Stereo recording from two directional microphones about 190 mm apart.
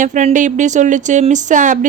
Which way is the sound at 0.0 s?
40° right (ahead or behind).